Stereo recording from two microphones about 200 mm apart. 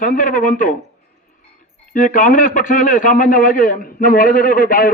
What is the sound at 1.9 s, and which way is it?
Speech, 40° left (ahead or behind).